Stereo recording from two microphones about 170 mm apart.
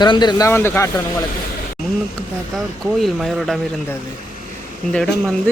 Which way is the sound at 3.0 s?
Centre (ahead or behind).